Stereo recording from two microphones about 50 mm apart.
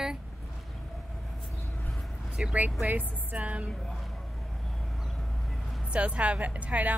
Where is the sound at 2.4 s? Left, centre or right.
Right.